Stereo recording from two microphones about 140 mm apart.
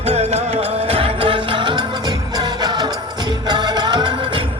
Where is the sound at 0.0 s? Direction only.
45° right (ahead or behind).